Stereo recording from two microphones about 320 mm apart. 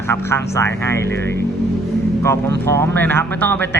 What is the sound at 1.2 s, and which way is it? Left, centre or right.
Speech, right.